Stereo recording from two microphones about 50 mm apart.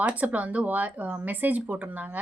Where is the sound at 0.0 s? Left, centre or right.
Right.